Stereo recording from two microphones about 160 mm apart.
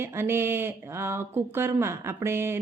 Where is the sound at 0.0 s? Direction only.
15° right (ahead or behind).